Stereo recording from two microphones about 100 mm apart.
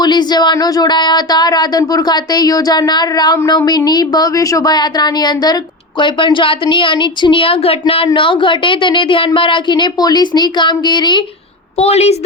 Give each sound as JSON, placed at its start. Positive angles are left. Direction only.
{"t": 0.0, "sound": "speech", "side_deg": 45}
{"t": 6.0, "sound": "a woman's voice", "side_deg": 55}
{"t": 11.8, "sound": "a woman's voice", "side_deg": 90}